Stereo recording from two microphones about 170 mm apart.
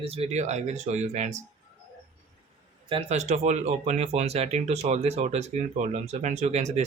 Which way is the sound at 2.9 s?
40° right (ahead or behind).